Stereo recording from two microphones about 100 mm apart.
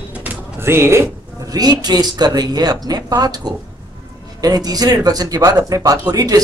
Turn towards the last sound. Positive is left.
turn(degrees=-40)  # may be behind; listen again after turning